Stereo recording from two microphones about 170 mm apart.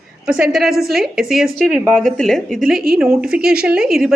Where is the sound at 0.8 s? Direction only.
65° right (ahead or behind).